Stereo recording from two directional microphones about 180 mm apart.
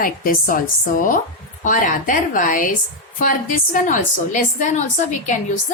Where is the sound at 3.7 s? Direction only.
45° left (ahead or behind).